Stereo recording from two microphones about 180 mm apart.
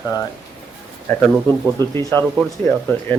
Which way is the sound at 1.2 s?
10° left (ahead or behind).